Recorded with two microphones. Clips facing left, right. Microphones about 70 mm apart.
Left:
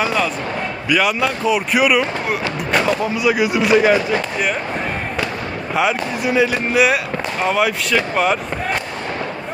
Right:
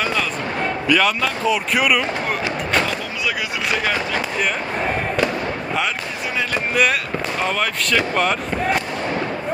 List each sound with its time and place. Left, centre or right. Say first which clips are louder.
0.0 s speech: left 3 dB; centre
2.7 s speech: left 7 dB; centre
5.7 s speech: left 9 dB; centre